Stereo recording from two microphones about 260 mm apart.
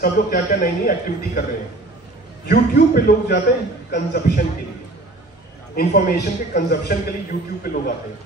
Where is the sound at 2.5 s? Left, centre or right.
Left.